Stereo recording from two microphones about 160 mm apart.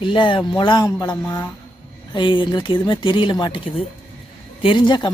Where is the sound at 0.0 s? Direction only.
30° left (ahead or behind).